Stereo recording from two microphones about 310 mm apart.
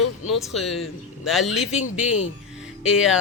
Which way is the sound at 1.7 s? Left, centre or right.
Left.